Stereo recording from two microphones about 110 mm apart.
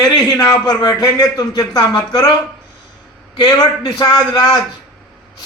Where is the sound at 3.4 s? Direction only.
40° left (ahead or behind).